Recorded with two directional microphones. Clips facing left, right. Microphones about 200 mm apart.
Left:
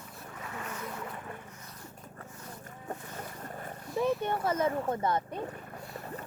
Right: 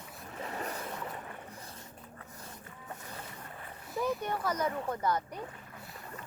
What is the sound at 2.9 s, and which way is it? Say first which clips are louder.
Boat: left 5 dB; 45° left (ahead or behind).